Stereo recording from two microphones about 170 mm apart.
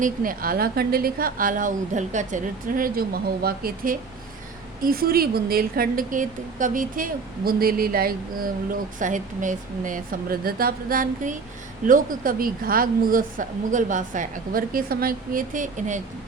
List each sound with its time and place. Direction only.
0.0 s a woman's voice: 55° right (ahead or behind)
8.7 s a woman's voice: 50° right (ahead or behind)